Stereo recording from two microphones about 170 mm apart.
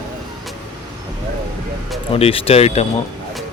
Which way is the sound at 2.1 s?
35° left (ahead or behind).